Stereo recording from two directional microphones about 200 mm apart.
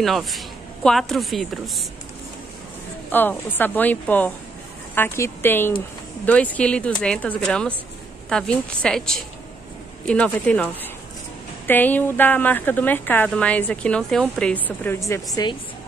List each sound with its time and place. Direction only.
0.0 s a woman's voice: centre (ahead or behind)
3.1 s a woman's voice: 10° left (ahead or behind)